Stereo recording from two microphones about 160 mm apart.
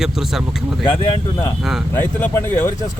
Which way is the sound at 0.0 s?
Centre (ahead or behind).